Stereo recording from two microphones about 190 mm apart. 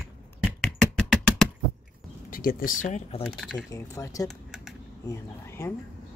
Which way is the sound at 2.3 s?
50° left (ahead or behind).